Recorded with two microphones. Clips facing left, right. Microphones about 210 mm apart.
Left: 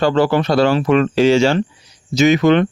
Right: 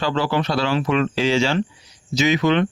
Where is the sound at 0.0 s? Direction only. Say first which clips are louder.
Left 7 dB; 50° left (ahead or behind).